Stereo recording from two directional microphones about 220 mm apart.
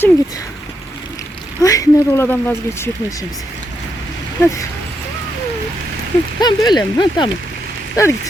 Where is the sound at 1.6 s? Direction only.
15° left (ahead or behind).